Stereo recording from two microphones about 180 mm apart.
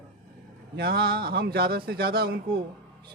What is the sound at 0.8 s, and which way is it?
A man's voice, 60° right (ahead or behind).